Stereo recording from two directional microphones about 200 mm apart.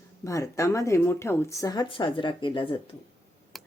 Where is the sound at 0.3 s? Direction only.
15° left (ahead or behind).